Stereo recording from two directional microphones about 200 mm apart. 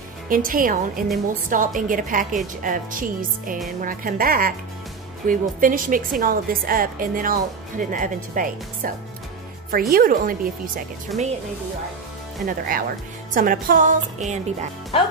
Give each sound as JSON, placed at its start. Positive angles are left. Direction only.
{"t": 0.3, "sound": "a woman's voice", "side_deg": -45}
{"t": 12.4, "sound": "a woman's voice", "side_deg": -45}